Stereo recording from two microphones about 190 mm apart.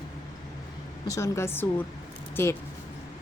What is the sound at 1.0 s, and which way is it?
Speech, 15° left (ahead or behind).